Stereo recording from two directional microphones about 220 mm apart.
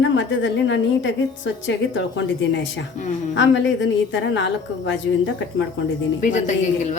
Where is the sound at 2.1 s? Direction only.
55° left (ahead or behind).